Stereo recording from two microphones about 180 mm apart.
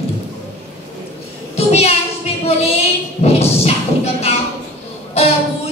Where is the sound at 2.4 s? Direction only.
35° left (ahead or behind).